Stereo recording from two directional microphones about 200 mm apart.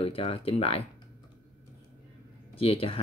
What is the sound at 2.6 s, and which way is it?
Speech, 30° left (ahead or behind).